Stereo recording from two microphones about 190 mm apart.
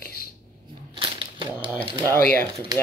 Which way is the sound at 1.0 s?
25° right (ahead or behind).